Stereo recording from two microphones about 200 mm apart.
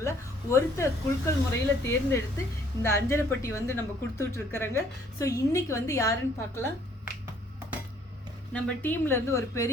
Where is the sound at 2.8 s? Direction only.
10° left (ahead or behind).